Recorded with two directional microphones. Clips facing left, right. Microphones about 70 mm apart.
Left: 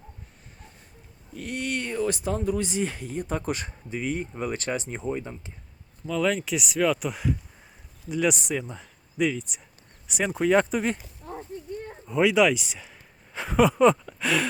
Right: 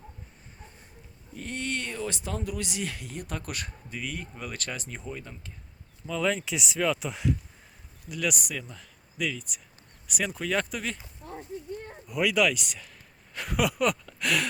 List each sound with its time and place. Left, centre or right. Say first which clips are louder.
1.4 s speech: left 3 dB; centre
2.4 s speech: left 7 dB; left
6.1 s speech: left 3 dB; centre
8.1 s speech: left 6 dB; left
8.7 s a sound: left 7 dB; centre
10.2 s speech: left 7 dB; left
12.3 s speech: left 4 dB; centre; by 14.0 s left
14.0 s speech: left 3 dB; centre